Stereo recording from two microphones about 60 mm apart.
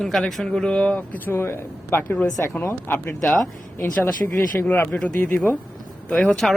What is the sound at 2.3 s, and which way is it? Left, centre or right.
Speech, left.